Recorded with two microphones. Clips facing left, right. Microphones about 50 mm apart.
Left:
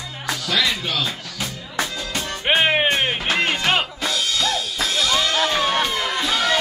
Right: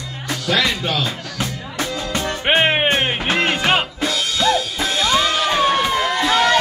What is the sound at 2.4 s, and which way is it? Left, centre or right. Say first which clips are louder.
Music: right 1 dB; right.